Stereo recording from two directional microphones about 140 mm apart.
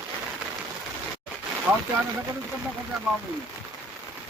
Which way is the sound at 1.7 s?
15° right (ahead or behind).